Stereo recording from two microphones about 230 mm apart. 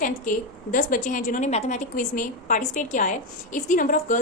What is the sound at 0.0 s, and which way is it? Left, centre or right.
A woman's voice, left.